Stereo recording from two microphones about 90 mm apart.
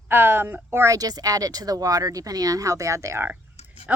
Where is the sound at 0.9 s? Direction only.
45° right (ahead or behind).